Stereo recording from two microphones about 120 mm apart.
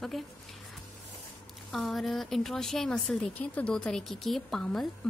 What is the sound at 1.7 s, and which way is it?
A woman's voice, centre (ahead or behind).